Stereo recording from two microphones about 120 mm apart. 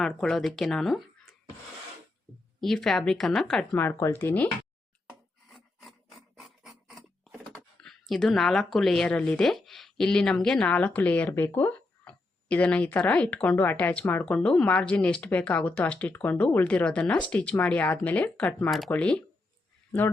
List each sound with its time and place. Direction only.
0.0 s speech: 5° left (ahead or behind)
2.6 s a woman's voice: 5° left (ahead or behind)
3.8 s speech: 20° left (ahead or behind)
5.5 s a sound: 5° right (ahead or behind)
7.5 s speech: 5° left (ahead or behind)